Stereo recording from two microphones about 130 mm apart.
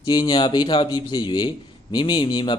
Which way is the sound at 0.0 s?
35° left (ahead or behind).